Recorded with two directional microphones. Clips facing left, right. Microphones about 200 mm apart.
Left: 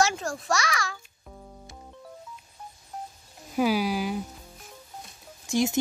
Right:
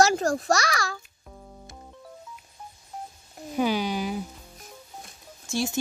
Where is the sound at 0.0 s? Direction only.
40° right (ahead or behind).